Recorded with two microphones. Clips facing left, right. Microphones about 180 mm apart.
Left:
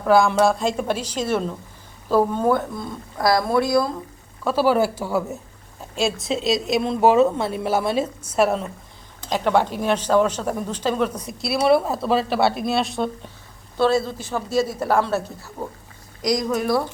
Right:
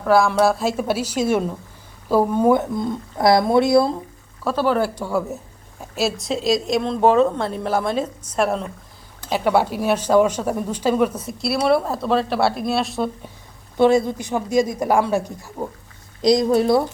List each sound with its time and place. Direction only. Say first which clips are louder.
0.0 s speech: even; centre (ahead or behind); by 3.9 s 25° right (ahead or behind)
4.4 s speech: left 1 dB; 5° left (ahead or behind)
9.3 s speech: right 1 dB; 10° right (ahead or behind)
13.7 s speech: right 4 dB; 15° right (ahead or behind)
16.2 s speech: right 6 dB; 25° right (ahead or behind)